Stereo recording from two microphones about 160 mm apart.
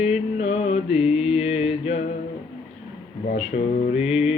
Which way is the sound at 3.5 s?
65° left (ahead or behind).